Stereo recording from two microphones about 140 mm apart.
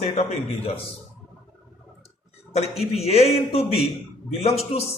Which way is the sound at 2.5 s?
50° left (ahead or behind).